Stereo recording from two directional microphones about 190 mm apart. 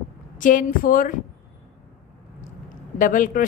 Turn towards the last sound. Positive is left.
turn(degrees=45)  # may be behind; listen again after turning